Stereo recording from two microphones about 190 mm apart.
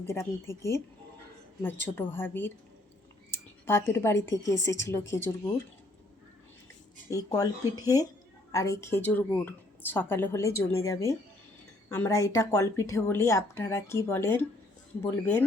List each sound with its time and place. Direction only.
0.0 s a woman's voice: 15° left (ahead or behind)
7.1 s a woman's voice: 20° left (ahead or behind)